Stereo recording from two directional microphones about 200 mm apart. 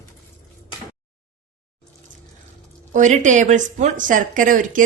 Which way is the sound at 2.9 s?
40° right (ahead or behind).